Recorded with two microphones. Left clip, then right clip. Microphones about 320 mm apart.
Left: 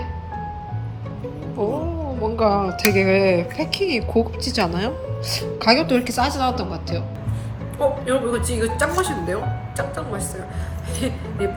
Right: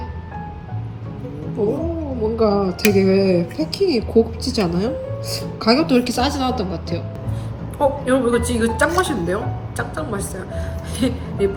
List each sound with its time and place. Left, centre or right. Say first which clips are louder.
1.5 s speech: right 3 dB; centre
2.3 s speech: right 1 dB; left
2.6 s speech: right 1 dB; centre
6.3 s speech: even; centre